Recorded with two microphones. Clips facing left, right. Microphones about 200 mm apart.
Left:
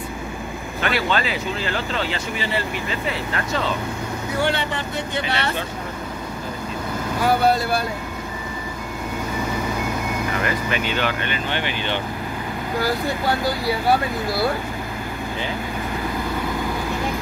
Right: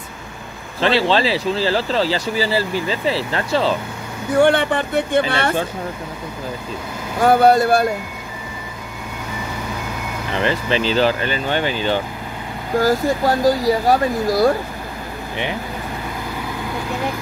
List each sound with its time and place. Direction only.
0.7 s speech: 30° right (ahead or behind)
4.4 s speech: 50° right (ahead or behind)
7.2 s speech: 50° right (ahead or behind)
10.3 s speech: 30° right (ahead or behind)